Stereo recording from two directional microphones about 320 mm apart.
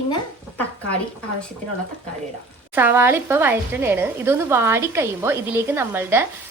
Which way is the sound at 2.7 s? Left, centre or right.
Centre.